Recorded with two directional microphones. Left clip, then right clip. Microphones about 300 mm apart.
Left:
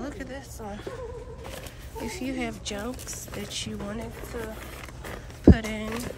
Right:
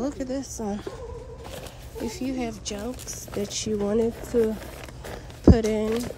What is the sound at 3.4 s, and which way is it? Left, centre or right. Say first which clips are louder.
Speech: right 9 dB; centre.